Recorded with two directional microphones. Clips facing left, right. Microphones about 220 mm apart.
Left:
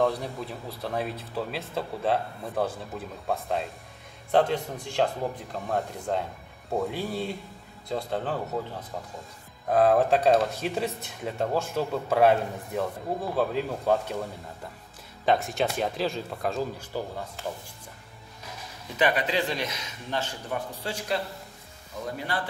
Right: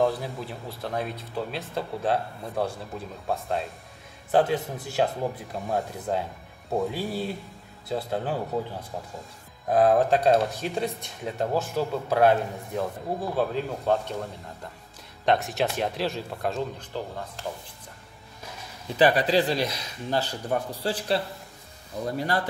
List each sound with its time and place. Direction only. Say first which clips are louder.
0.0 s speech: right 1 dB; centre (ahead or behind)
15.2 s speech: right 1 dB; centre (ahead or behind)
18.9 s a man's voice: right 5 dB; 35° right (ahead or behind)